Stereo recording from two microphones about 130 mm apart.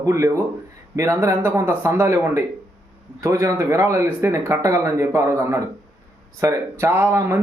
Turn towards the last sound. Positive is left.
turn(degrees=-20)  # may be behind; listen again after turning